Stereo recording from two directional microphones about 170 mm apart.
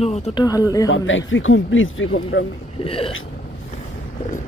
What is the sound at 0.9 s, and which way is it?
Speech, 90° left.